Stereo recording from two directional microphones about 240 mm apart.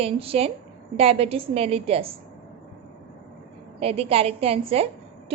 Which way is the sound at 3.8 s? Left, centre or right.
Right.